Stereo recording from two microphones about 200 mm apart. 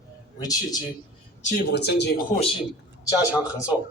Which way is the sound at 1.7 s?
55° left (ahead or behind).